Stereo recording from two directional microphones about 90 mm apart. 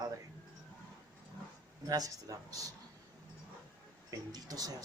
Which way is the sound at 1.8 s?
45° right (ahead or behind).